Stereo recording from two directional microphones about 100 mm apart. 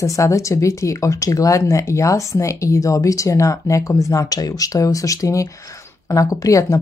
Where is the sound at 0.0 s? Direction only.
30° left (ahead or behind).